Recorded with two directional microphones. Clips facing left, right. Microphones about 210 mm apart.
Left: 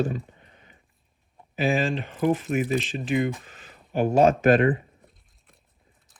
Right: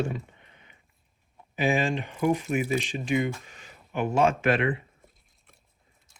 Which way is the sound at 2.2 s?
40° left (ahead or behind).